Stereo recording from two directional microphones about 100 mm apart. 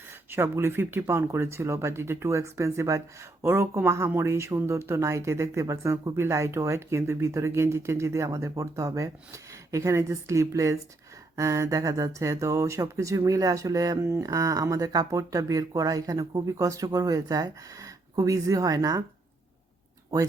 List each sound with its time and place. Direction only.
0.3 s speech: 25° right (ahead or behind)